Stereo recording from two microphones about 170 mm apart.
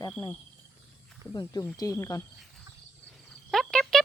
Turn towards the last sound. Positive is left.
turn(degrees=5)  # may be behind; listen again after turning